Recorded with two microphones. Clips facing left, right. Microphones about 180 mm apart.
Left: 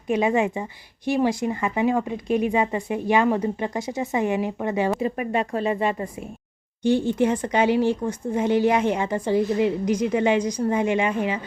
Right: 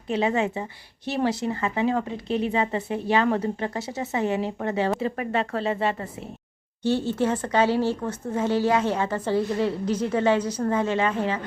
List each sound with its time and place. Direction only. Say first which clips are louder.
0.1 s speech: left 3 dB; 15° left (ahead or behind)